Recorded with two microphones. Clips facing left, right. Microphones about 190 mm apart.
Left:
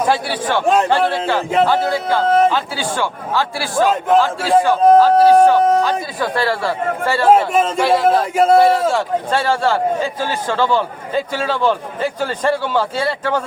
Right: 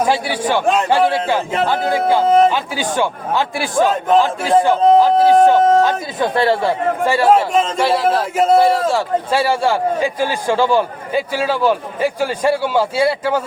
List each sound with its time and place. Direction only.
0.1 s a man's voice: 15° right (ahead or behind)
7.5 s a man's voice: centre (ahead or behind)